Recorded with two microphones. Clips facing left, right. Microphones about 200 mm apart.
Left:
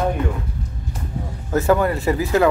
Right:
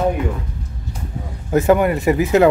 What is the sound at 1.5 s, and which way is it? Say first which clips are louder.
Speech: right 3 dB; 20° right (ahead or behind).